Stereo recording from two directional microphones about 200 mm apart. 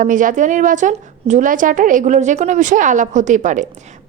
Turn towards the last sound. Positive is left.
turn(degrees=-40)  # may be behind; listen again after turning